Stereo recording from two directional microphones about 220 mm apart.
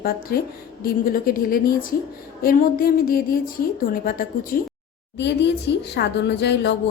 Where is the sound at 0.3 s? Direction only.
45° left (ahead or behind).